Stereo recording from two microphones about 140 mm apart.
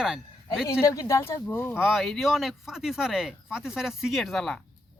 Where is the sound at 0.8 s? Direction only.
25° left (ahead or behind).